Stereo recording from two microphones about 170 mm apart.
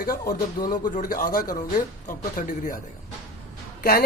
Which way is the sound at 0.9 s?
55° left (ahead or behind).